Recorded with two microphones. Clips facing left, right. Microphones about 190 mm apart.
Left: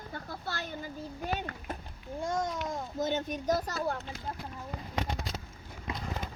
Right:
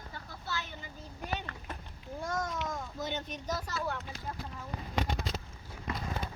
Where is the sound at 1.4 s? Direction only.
40° left (ahead or behind).